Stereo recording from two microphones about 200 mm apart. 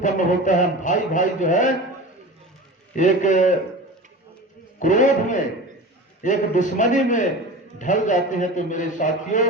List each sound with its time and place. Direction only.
0.0 s a man's voice: 40° left (ahead or behind)
2.9 s a man's voice: 40° left (ahead or behind)
4.8 s a man's voice: 40° left (ahead or behind)